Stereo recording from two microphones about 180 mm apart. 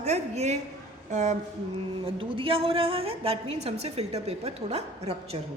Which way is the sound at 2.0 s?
30° right (ahead or behind).